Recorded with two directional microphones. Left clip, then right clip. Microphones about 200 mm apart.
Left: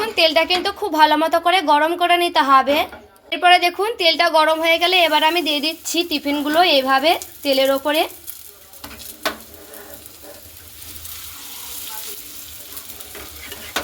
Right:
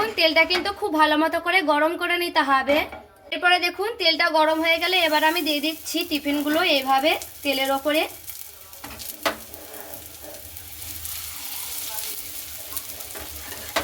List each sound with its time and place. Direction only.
0.2 s a woman's voice: 40° left (ahead or behind)